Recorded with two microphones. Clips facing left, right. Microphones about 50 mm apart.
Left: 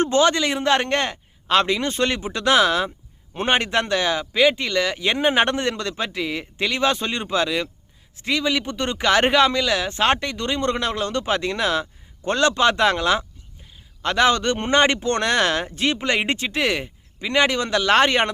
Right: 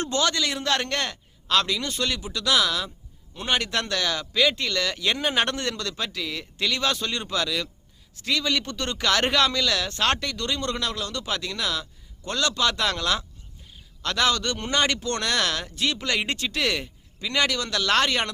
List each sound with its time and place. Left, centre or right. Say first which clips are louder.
0.0 s speech: left 7 dB; left